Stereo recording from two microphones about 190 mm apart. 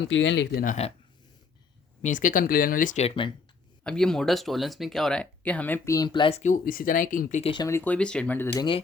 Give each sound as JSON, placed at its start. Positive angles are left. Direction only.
{"t": 0.0, "sound": "speech", "side_deg": 75}
{"t": 0.5, "sound": "speech", "side_deg": 45}
{"t": 2.0, "sound": "speech", "side_deg": 40}
{"t": 3.8, "sound": "speech", "side_deg": 5}
{"t": 7.5, "sound": "speech", "side_deg": 15}